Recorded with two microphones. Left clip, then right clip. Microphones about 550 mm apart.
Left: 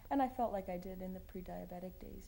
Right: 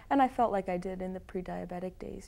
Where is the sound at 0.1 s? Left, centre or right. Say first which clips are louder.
Right 9 dB; right.